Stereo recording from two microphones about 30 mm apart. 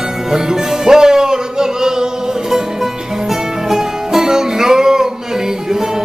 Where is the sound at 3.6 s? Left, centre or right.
Centre.